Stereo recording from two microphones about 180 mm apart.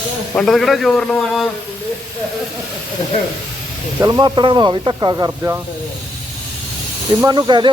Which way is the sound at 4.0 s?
20° right (ahead or behind).